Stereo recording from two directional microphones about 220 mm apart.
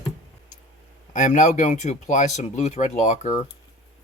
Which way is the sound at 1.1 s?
35° left (ahead or behind).